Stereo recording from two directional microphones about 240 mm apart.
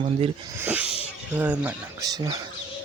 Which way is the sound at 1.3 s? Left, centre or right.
Centre.